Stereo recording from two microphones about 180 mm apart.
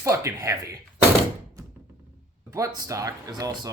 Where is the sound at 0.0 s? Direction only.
15° right (ahead or behind).